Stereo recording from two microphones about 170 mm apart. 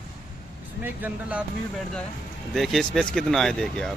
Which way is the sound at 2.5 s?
Centre (ahead or behind).